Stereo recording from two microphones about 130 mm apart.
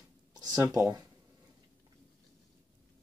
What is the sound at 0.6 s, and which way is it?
Speech, 20° right (ahead or behind).